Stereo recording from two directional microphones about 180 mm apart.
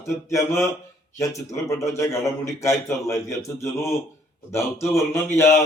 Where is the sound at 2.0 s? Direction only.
15° left (ahead or behind).